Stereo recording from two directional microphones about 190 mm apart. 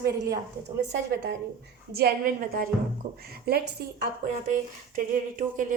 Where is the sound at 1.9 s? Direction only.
55° right (ahead or behind).